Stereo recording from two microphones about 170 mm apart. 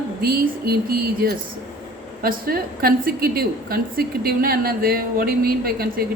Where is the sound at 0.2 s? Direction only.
65° right (ahead or behind).